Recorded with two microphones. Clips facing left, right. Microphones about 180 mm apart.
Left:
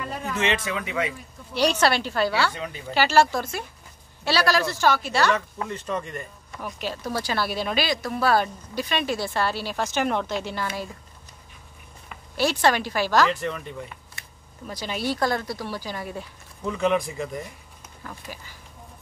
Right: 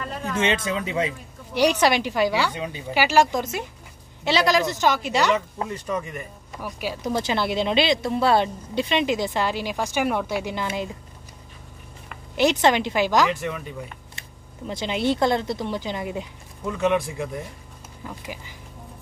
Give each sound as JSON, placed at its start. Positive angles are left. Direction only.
{"t": 0.0, "sound": "a sound", "side_deg": 5}
{"t": 0.5, "sound": "speech", "side_deg": -30}
{"t": 1.5, "sound": "speech", "side_deg": -15}
{"t": 5.9, "sound": "speech", "side_deg": -5}
{"t": 12.4, "sound": "speech", "side_deg": -20}
{"t": 13.3, "sound": "speech", "side_deg": -5}
{"t": 14.7, "sound": "speech", "side_deg": -25}
{"t": 16.6, "sound": "speech", "side_deg": -5}
{"t": 18.0, "sound": "speech", "side_deg": -15}